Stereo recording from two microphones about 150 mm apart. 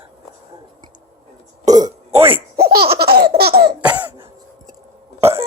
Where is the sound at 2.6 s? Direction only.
90° right.